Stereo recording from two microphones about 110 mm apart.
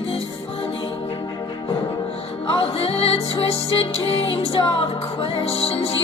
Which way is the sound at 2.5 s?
60° left (ahead or behind).